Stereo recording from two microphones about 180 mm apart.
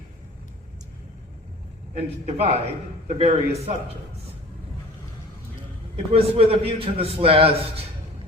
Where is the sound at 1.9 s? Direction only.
35° right (ahead or behind).